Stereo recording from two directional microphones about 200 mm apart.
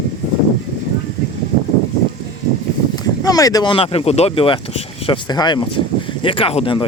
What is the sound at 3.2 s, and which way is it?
Speech, 20° left (ahead or behind).